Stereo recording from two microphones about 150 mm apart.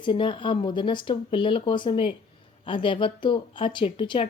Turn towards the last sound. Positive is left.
turn(degrees=30)  # may be behind; listen again after turning